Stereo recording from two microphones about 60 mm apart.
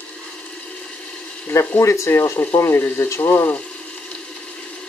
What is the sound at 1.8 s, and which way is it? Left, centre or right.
Speech, left.